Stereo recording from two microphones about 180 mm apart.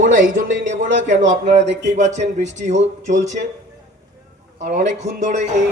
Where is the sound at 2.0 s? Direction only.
40° right (ahead or behind).